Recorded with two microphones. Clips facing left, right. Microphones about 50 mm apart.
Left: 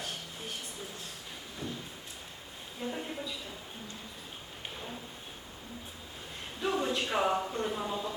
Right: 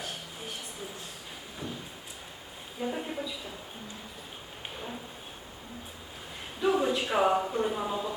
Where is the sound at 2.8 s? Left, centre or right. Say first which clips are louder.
Right 4 dB; centre.